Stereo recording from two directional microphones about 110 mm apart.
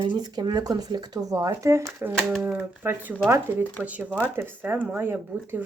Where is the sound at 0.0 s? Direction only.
45° right (ahead or behind).